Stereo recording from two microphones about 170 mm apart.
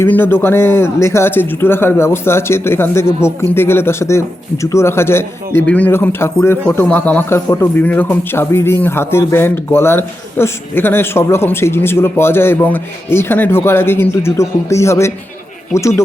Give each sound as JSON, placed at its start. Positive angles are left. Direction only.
{"t": 0.0, "sound": "a man's voice", "side_deg": 10}